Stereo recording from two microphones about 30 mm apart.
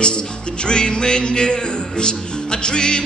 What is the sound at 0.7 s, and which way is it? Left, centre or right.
Music, left.